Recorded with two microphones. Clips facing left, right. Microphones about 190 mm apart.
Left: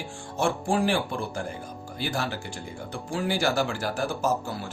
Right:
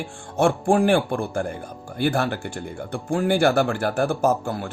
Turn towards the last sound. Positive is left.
turn(degrees=-55)  # may be behind; listen again after turning